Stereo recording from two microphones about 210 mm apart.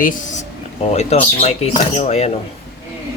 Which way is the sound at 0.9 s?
30° left (ahead or behind).